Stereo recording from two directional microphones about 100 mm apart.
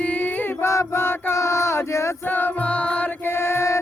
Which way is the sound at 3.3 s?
25° left (ahead or behind).